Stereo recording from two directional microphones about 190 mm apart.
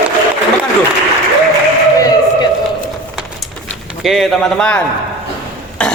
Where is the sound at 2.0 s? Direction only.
20° left (ahead or behind).